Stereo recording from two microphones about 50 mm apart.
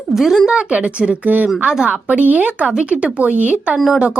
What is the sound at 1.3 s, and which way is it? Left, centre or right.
Speech, right.